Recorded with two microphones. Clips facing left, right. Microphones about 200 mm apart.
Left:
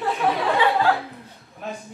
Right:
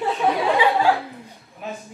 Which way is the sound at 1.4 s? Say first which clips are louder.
Even; centre (ahead or behind).